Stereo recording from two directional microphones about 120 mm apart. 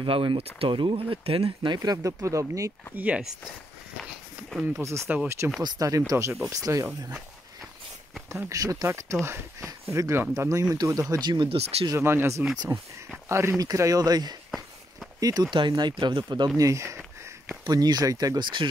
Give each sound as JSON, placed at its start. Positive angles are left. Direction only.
{"t": 0.0, "sound": "speech", "side_deg": -45}
{"t": 1.8, "sound": "speech", "side_deg": -30}
{"t": 3.0, "sound": "speech", "side_deg": -10}
{"t": 4.8, "sound": "speech", "side_deg": -20}
{"t": 8.3, "sound": "speech", "side_deg": -25}
{"t": 11.9, "sound": "speech", "side_deg": -20}
{"t": 16.5, "sound": "speech", "side_deg": -25}